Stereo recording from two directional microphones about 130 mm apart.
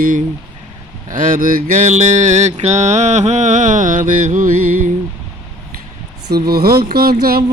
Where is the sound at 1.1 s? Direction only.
90° right; by 4.9 s 70° right (ahead or behind).